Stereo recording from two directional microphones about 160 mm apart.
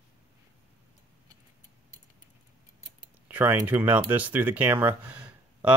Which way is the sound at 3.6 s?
10° right (ahead or behind).